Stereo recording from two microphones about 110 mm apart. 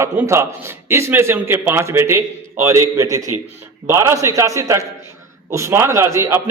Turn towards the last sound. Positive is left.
turn(degrees=-25)  # may be behind; listen again after turning